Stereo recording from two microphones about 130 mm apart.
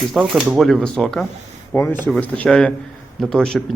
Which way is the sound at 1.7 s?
20° left (ahead or behind).